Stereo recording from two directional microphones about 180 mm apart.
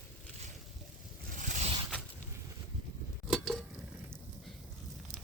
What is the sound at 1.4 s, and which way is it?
Zipper, 45° right (ahead or behind).